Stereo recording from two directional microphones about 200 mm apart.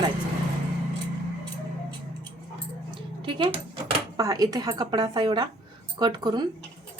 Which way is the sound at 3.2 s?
25° right (ahead or behind).